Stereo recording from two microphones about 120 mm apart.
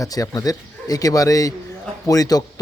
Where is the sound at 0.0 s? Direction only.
30° left (ahead or behind).